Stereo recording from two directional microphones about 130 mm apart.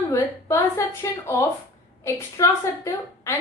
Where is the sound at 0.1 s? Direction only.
25° left (ahead or behind).